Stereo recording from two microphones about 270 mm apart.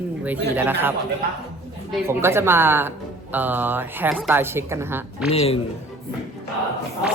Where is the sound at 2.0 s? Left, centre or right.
Centre.